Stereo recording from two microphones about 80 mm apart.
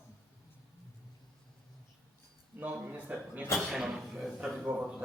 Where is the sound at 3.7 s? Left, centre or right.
Centre.